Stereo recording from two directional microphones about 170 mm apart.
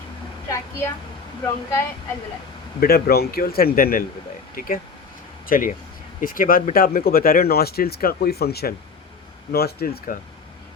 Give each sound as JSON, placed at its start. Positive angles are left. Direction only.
{"t": 0.4, "sound": "a woman's voice", "side_deg": 15}
{"t": 2.8, "sound": "speech", "side_deg": 65}